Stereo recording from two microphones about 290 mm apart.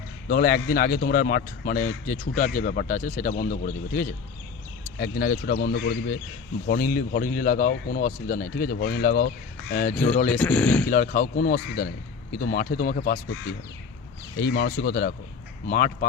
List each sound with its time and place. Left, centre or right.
0.3 s speech: left
9.9 s speech: centre
10.8 s speech: left
14.3 s speech: left